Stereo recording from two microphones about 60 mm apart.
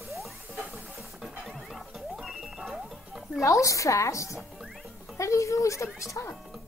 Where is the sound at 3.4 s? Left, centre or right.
Left.